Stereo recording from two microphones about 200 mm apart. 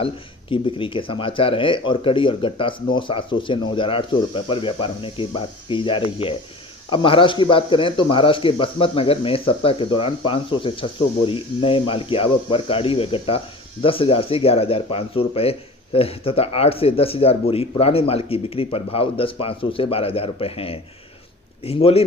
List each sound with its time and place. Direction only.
0.5 s speech: 25° left (ahead or behind)